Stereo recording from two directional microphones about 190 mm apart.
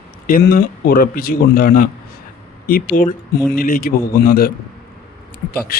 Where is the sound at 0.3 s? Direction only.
50° left (ahead or behind).